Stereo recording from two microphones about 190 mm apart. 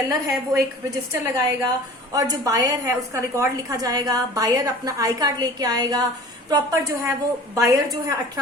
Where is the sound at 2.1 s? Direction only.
20° right (ahead or behind).